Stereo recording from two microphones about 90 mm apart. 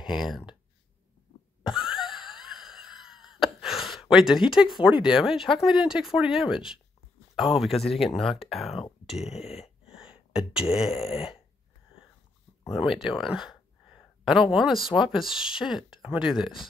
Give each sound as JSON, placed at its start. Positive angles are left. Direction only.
{"t": 0.1, "sound": "speech", "side_deg": -5}
{"t": 1.6, "sound": "wheeze", "side_deg": -5}
{"t": 3.6, "sound": "gasp", "side_deg": 0}
{"t": 5.0, "sound": "speech", "side_deg": -5}
{"t": 9.0, "sound": "a sound", "side_deg": -5}
{"t": 10.7, "sound": "speech", "side_deg": -5}
{"t": 11.0, "sound": "a sound", "side_deg": 90}
{"t": 12.6, "sound": "a sound", "side_deg": -5}
{"t": 14.5, "sound": "speech", "side_deg": -5}